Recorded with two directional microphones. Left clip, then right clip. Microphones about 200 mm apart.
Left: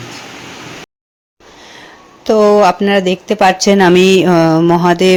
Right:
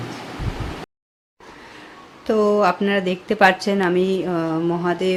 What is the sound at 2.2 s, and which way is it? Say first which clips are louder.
Speech: left 9 dB; 25° left (ahead or behind).